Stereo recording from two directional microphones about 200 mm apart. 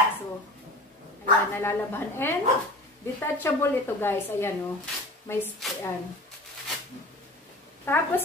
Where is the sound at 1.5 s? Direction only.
10° left (ahead or behind).